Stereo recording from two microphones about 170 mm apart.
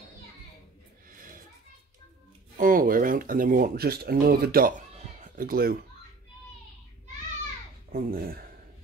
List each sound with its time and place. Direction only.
2.5 s speech: 55° right (ahead or behind)
7.9 s speech: 60° right (ahead or behind)